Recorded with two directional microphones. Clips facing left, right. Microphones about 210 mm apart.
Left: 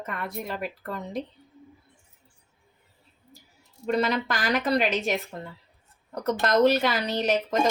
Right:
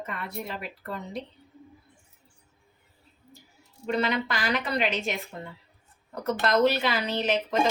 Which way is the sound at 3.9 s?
40° left (ahead or behind).